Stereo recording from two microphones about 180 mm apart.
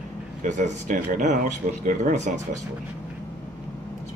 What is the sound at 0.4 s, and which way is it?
Speech, 40° right (ahead or behind).